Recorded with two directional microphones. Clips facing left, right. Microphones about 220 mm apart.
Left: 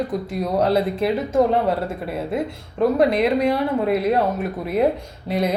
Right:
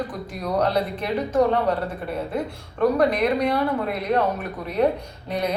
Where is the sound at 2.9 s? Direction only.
25° left (ahead or behind).